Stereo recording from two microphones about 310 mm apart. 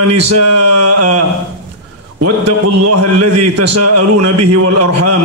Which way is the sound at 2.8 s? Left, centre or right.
Right.